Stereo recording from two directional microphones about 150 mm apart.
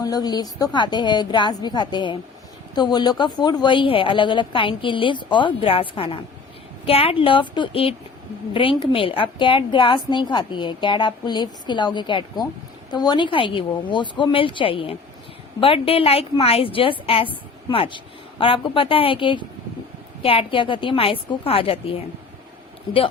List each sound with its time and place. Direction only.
0.0 s a woman's voice: 25° left (ahead or behind)